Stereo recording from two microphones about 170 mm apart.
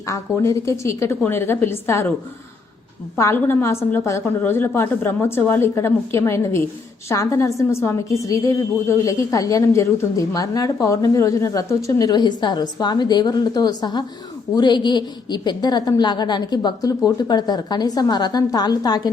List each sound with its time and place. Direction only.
0.1 s a woman's voice: 20° left (ahead or behind)
3.2 s a woman's voice: 15° left (ahead or behind)